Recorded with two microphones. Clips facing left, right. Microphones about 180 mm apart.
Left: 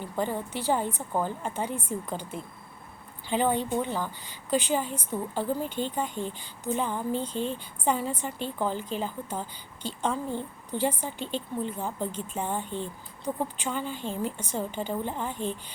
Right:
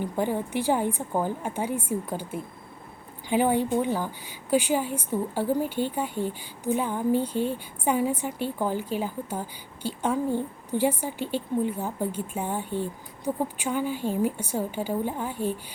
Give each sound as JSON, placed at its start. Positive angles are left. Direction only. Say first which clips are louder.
{"t": 0.0, "sound": "speech", "louder": "right 3 dB", "side_deg": -15}